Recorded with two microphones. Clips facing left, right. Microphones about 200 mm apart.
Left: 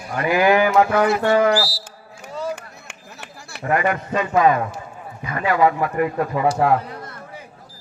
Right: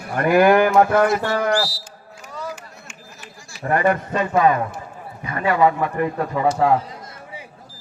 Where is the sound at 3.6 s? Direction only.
35° right (ahead or behind).